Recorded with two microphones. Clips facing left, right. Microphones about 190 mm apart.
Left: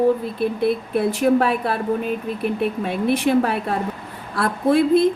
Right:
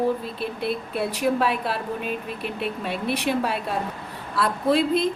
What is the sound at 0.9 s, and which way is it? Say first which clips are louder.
A woman's voice: left 5 dB; 50° left (ahead or behind).